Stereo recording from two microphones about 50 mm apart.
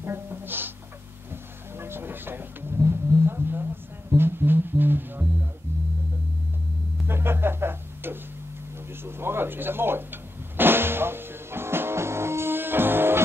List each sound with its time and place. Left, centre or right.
0.0 s speech: right
1.3 s vehicle: right
4.2 s music: right
7.1 s music: right
9.0 s drum: right